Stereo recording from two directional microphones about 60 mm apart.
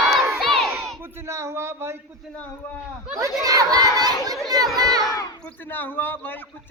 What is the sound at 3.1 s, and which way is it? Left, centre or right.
A child's voice, right.